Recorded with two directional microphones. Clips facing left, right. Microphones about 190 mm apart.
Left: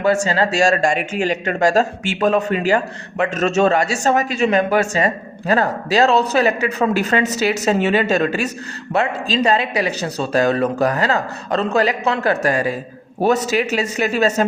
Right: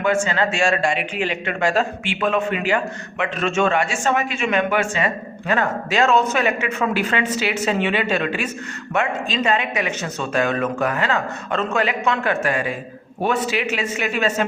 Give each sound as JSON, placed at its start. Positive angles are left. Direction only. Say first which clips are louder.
{"t": 0.0, "sound": "speech", "louder": "left 3 dB", "side_deg": 35}